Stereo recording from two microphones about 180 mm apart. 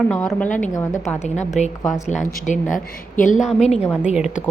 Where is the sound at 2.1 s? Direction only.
40° left (ahead or behind).